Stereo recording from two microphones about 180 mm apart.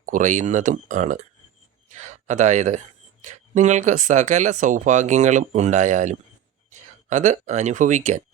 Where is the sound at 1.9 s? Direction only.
40° right (ahead or behind).